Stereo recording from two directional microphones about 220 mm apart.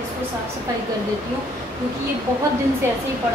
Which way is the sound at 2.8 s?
10° right (ahead or behind).